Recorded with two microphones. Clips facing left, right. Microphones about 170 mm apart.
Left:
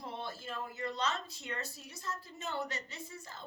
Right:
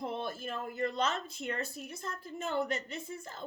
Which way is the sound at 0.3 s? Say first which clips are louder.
Right 4 dB; 55° right (ahead or behind).